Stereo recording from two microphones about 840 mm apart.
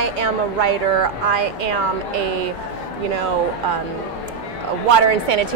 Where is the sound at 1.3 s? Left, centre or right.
Right.